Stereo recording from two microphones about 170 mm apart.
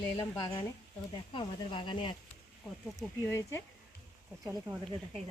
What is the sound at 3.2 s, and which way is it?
Speech, 10° left (ahead or behind).